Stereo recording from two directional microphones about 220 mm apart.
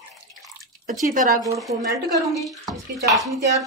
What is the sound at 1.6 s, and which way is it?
Speech, centre (ahead or behind).